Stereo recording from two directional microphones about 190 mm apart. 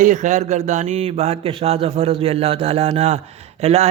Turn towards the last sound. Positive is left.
turn(degrees=-35)  # may be behind; listen again after turning